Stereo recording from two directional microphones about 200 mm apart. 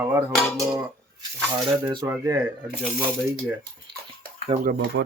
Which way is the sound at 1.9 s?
15° right (ahead or behind).